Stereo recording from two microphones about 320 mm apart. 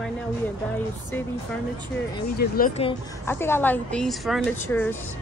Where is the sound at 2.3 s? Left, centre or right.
Left.